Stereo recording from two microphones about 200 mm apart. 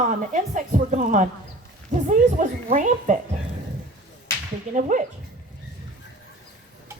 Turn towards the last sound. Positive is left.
turn(degrees=-40)  # may be behind; listen again after turning